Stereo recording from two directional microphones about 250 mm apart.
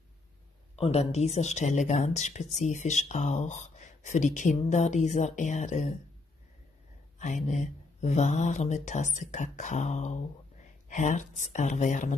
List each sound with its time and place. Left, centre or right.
0.7 s speech: left
7.2 s speech: left